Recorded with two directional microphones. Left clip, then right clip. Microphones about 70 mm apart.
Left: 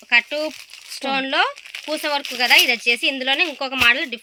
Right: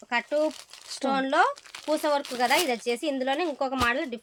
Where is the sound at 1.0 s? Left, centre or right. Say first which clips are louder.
Left 3 dB; right.